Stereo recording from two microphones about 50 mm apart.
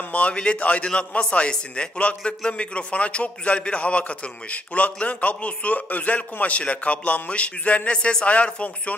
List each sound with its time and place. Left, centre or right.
0.1 s a man's voice: left